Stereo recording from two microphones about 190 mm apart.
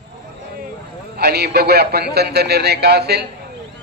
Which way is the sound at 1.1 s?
55° right (ahead or behind).